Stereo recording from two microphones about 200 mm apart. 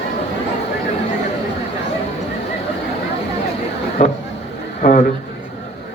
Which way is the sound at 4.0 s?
35° left (ahead or behind).